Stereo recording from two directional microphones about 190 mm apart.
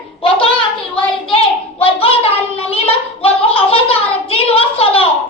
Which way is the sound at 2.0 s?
30° left (ahead or behind).